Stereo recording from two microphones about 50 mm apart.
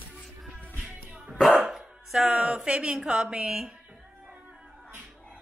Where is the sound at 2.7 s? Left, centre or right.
Right.